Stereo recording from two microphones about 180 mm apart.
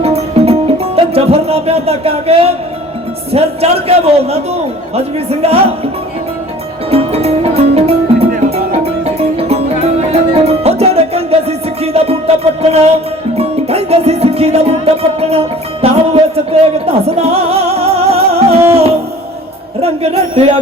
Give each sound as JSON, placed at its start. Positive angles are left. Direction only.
{"t": 0.0, "sound": "music", "side_deg": -35}
{"t": 3.3, "sound": "a man's voice", "side_deg": -35}
{"t": 6.9, "sound": "music", "side_deg": -35}
{"t": 18.7, "sound": "a man's voice", "side_deg": -35}